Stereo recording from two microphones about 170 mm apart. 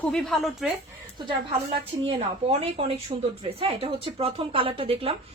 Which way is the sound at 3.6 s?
35° right (ahead or behind).